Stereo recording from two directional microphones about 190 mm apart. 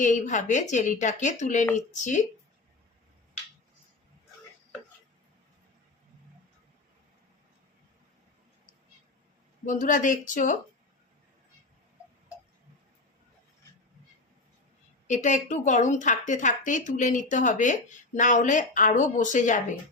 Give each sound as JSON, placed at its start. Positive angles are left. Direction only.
{"t": 0.0, "sound": "a woman's voice", "side_deg": 40}
{"t": 9.6, "sound": "speech", "side_deg": 40}
{"t": 15.0, "sound": "a woman's voice", "side_deg": 40}